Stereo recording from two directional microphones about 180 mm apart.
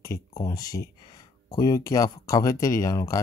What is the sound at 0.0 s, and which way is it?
Speech, 20° left (ahead or behind).